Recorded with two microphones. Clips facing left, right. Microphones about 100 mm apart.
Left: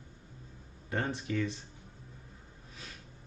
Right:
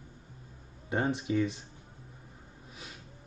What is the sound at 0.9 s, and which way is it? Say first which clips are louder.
Speech: right 4 dB; 15° right (ahead or behind).